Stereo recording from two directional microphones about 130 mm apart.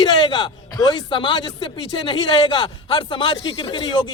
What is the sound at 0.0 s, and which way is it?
Speech, 35° left (ahead or behind).